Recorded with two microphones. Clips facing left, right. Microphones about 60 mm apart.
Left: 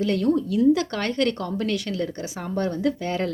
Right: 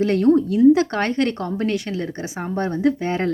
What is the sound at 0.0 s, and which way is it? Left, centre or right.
A woman's voice, right.